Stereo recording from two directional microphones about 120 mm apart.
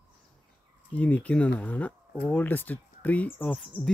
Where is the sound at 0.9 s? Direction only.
15° left (ahead or behind).